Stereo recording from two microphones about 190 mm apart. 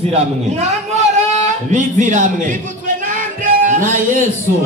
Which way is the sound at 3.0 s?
45° right (ahead or behind).